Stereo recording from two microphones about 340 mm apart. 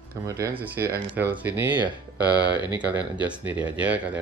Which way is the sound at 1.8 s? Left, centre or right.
Centre.